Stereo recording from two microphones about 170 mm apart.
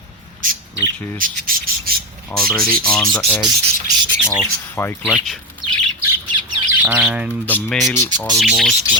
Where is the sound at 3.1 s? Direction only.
20° left (ahead or behind).